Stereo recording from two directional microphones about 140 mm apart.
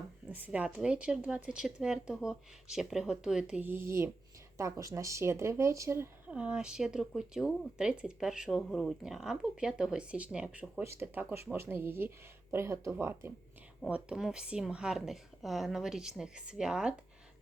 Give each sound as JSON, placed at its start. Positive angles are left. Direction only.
{"t": 0.3, "sound": "speech", "side_deg": -10}
{"t": 13.9, "sound": "speech", "side_deg": -5}